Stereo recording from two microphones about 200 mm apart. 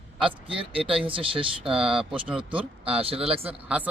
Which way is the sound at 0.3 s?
25° right (ahead or behind).